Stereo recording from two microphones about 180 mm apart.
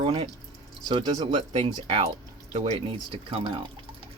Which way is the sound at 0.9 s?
25° right (ahead or behind).